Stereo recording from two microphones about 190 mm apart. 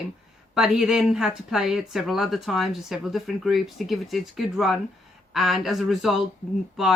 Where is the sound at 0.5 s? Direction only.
5° right (ahead or behind).